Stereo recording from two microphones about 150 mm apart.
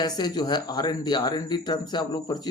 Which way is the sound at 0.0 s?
25° left (ahead or behind).